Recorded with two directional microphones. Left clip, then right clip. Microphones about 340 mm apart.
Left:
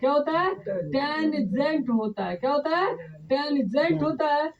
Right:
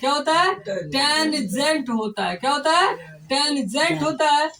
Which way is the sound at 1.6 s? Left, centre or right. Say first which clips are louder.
Right 5 dB; left.